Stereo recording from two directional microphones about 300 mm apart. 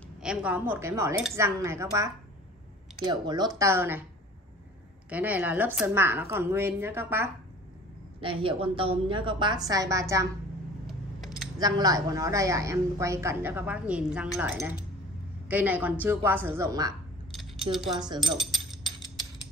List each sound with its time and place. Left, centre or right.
0.2 s a woman's voice: centre
3.1 s a woman's voice: centre
5.1 s a woman's voice: centre
10.9 s a sound: centre
11.5 s a woman's voice: centre
17.4 s keys jangling: centre
17.9 s a woman's voice: centre